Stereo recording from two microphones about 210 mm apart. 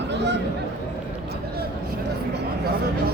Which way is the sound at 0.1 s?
55° right (ahead or behind).